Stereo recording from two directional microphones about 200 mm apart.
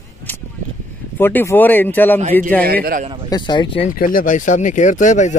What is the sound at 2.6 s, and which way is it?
Speech, 50° right (ahead or behind).